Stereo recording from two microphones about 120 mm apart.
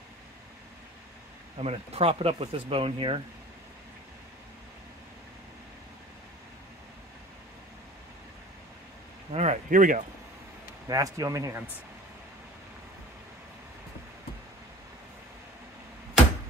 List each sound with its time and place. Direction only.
1.6 s speech: 55° right (ahead or behind)
9.3 s speech: 70° right (ahead or behind); by 10.0 s 90° right
10.9 s speech: 30° right (ahead or behind)